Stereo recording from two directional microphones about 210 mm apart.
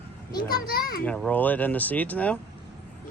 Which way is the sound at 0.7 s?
45° left (ahead or behind).